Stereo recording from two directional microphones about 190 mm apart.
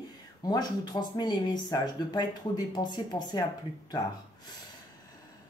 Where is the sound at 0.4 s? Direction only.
20° left (ahead or behind).